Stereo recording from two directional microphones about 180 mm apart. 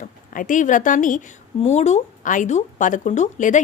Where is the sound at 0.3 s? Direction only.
45° left (ahead or behind).